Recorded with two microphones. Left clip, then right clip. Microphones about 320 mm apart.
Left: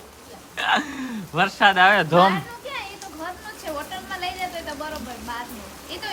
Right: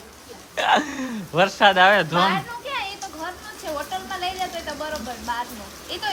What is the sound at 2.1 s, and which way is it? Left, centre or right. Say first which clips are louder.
Speech: left 3 dB; centre.